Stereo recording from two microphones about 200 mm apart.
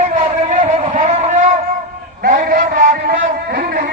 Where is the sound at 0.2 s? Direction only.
35° right (ahead or behind).